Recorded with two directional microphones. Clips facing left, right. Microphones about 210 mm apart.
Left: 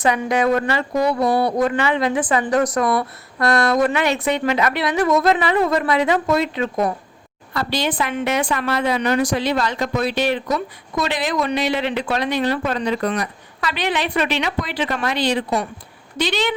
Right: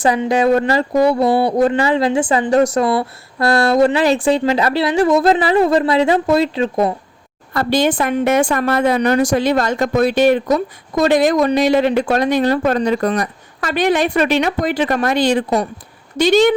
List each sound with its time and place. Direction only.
0.0 s speech: 30° right (ahead or behind)
7.5 s a woman's voice: 50° right (ahead or behind)